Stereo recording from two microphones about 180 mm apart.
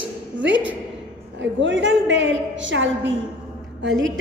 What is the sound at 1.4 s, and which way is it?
A woman's voice, 90° right.